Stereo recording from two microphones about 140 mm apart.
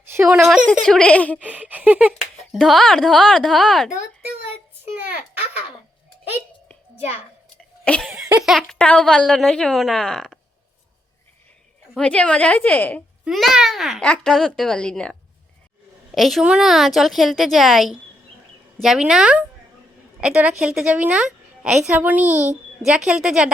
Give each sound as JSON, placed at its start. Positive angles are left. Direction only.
{"t": 0.0, "sound": "a sound", "side_deg": -15}
{"t": 0.3, "sound": "speech", "side_deg": 0}
{"t": 1.4, "sound": "a woman's voice", "side_deg": -10}
{"t": 2.4, "sound": "speech", "side_deg": 0}
{"t": 4.9, "sound": "a woman's voice", "side_deg": -10}
{"t": 8.0, "sound": "speech", "side_deg": -5}
{"t": 11.9, "sound": "a woman's voice", "side_deg": 10}
{"t": 13.2, "sound": "speech", "side_deg": 0}
{"t": 16.1, "sound": "a woman's voice", "side_deg": 0}